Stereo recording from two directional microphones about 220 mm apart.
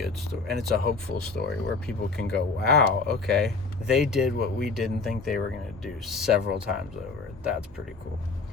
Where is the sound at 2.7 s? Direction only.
Centre (ahead or behind).